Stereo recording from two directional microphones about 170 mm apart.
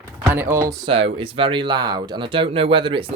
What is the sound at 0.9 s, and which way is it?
Speech, 35° right (ahead or behind).